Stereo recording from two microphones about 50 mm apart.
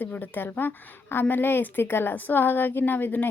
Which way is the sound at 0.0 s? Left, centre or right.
Left.